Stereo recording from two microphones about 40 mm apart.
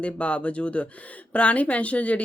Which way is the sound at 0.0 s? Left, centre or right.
Left.